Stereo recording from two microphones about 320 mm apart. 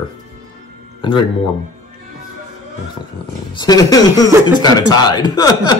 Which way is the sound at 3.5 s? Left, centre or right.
Centre.